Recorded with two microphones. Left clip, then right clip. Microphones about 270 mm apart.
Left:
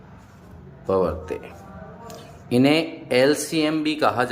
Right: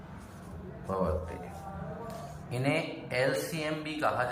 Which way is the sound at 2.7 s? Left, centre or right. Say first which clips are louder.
Left 11 dB; left.